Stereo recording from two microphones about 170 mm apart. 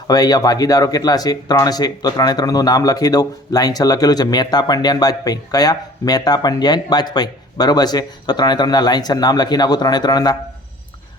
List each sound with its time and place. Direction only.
0.1 s speech: 25° left (ahead or behind)